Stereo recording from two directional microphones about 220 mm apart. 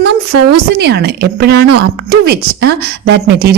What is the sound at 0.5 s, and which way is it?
A woman's voice, 50° right (ahead or behind).